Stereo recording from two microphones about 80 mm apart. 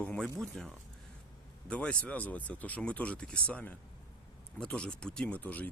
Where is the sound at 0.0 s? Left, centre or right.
Centre.